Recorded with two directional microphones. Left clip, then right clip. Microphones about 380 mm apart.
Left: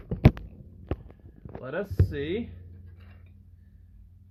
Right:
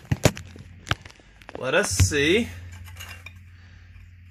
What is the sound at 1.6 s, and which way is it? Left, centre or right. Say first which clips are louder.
Cutlery: right 11 dB; right.